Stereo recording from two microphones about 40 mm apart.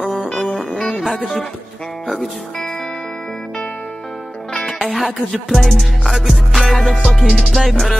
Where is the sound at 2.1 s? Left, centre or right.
Centre.